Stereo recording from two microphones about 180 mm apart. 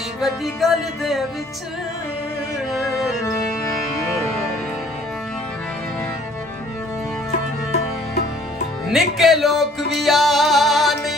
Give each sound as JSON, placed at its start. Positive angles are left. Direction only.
{"t": 0.2, "sound": "music", "side_deg": 0}
{"t": 2.7, "sound": "music", "side_deg": 0}
{"t": 3.3, "sound": "music", "side_deg": 15}
{"t": 8.9, "sound": "music", "side_deg": 0}